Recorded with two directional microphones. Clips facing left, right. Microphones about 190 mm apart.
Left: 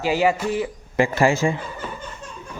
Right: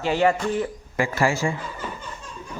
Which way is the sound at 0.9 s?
20° left (ahead or behind).